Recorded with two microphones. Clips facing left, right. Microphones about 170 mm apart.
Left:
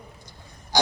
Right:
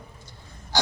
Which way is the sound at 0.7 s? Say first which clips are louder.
Left 3 dB; 15° left (ahead or behind).